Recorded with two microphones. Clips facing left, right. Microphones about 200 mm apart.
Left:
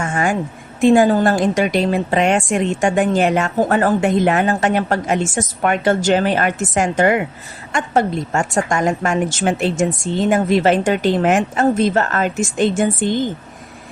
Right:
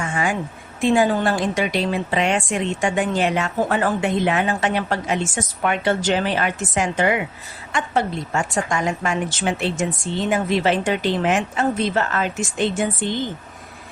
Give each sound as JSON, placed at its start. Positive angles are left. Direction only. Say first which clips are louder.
{"t": 0.0, "sound": "a woman's voice", "louder": "left 4 dB", "side_deg": 45}